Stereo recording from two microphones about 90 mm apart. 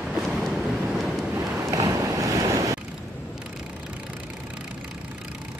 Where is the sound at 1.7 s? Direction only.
40° right (ahead or behind).